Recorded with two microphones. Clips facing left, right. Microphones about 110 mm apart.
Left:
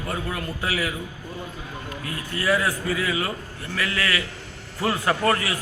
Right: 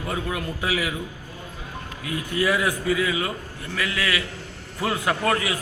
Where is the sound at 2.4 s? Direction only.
15° right (ahead or behind).